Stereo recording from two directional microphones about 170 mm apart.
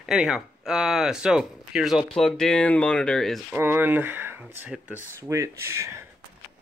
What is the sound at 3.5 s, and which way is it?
Speech, 10° right (ahead or behind).